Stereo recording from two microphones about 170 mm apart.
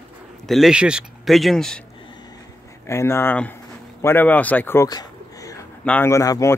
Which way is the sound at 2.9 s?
15° left (ahead or behind).